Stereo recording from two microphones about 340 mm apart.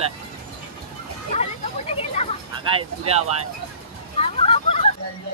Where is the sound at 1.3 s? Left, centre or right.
Centre.